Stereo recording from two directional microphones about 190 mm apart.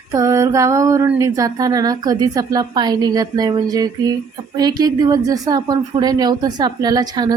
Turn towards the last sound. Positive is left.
turn(degrees=-20)  # may be behind; listen again after turning